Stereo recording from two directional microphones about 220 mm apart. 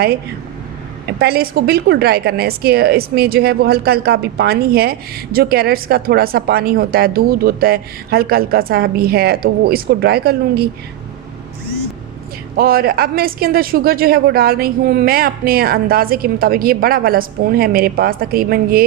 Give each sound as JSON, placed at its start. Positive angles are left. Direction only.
{"t": 1.0, "sound": "a woman's voice", "side_deg": -45}
{"t": 12.5, "sound": "a woman's voice", "side_deg": -45}